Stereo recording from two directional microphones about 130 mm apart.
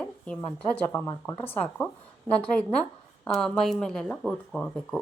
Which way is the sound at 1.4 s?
10° left (ahead or behind).